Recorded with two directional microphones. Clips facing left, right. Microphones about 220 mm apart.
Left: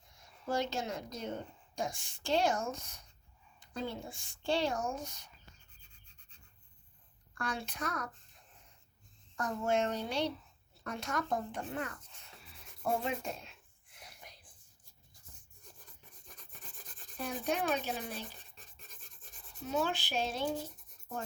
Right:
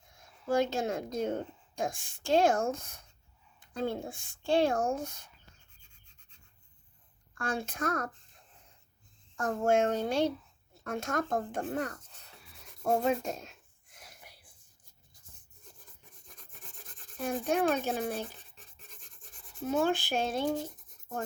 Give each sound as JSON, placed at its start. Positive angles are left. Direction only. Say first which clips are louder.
{"t": 0.1, "sound": "speech", "louder": "right 6 dB", "side_deg": -50}
{"t": 7.4, "sound": "speech", "louder": "right 6 dB", "side_deg": -50}
{"t": 9.4, "sound": "speech", "louder": "right 5 dB", "side_deg": -50}
{"t": 13.0, "sound": "a sound", "louder": "right 8 dB", "side_deg": -45}
{"t": 14.3, "sound": "whispering", "louder": "left 1 dB", "side_deg": -10}
{"t": 17.2, "sound": "speech", "louder": "right 6 dB", "side_deg": -50}
{"t": 19.6, "sound": "speech", "louder": "right 6 dB", "side_deg": -50}